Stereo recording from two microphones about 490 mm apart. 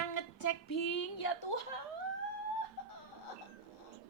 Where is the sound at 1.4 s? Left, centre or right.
Left.